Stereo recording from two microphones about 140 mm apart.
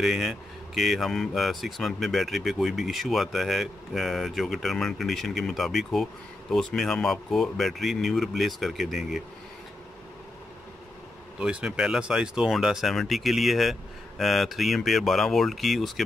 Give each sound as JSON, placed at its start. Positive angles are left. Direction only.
{"t": 0.0, "sound": "speech", "side_deg": -5}
{"t": 11.3, "sound": "speech", "side_deg": -5}